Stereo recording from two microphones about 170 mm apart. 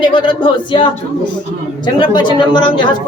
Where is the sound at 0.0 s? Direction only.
25° left (ahead or behind).